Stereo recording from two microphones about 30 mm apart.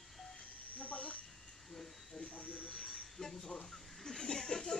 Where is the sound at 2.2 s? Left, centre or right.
Left.